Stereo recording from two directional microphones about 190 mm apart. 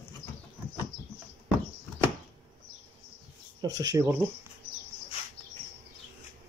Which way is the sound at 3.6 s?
20° right (ahead or behind).